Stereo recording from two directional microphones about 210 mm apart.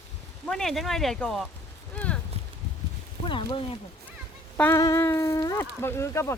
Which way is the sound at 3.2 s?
25° left (ahead or behind).